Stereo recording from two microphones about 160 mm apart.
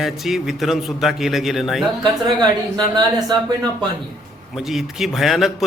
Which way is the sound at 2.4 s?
25° right (ahead or behind).